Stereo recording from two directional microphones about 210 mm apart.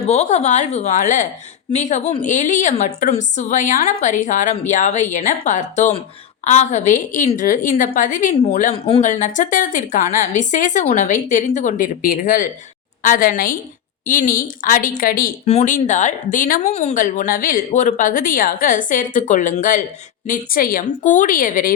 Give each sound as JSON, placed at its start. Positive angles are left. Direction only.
{"t": 0.1, "sound": "speech", "side_deg": 30}